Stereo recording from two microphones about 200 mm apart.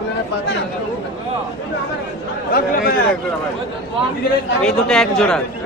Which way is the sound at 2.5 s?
50° left (ahead or behind).